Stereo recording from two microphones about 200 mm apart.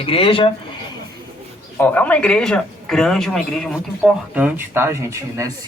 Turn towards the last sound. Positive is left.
turn(degrees=-15)  # may be behind; listen again after turning